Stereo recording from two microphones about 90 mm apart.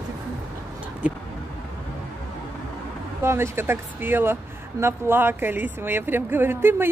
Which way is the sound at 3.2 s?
30° right (ahead or behind).